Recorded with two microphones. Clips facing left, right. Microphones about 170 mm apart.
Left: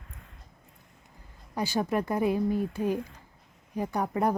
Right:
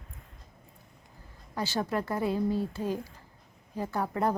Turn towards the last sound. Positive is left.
turn(degrees=15)  # may be behind; listen again after turning